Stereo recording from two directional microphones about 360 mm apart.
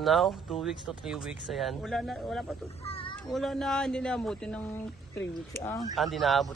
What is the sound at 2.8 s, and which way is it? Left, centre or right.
Speech, centre.